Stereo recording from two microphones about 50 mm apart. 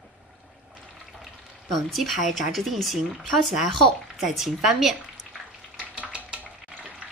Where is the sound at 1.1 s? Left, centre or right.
Centre.